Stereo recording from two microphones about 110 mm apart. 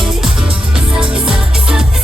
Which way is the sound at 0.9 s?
5° right (ahead or behind).